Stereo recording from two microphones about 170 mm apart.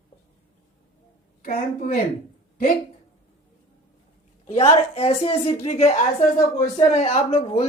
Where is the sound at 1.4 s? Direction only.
55° left (ahead or behind).